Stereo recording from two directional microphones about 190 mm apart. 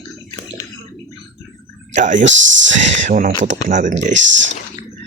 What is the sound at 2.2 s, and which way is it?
Speech, 75° right (ahead or behind).